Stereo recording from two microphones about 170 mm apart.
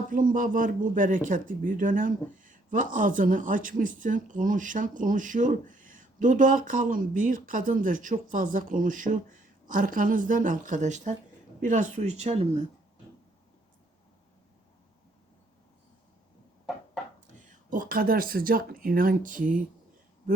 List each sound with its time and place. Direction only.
0.1 s speech: 55° right (ahead or behind); by 12.6 s 40° right (ahead or behind)
17.7 s speech: 55° right (ahead or behind)